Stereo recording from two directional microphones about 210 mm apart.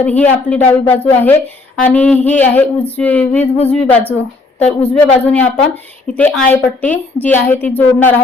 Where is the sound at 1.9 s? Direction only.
5° left (ahead or behind).